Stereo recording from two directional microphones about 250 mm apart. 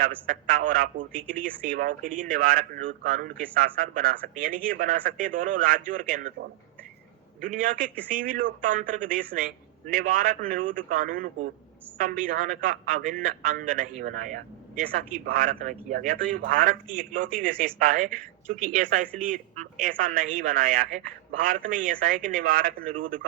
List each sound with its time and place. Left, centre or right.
0.3 s a man's voice: right
7.4 s a man's voice: right